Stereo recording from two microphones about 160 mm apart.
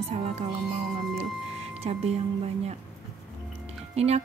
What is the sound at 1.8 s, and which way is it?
Speech, 40° right (ahead or behind).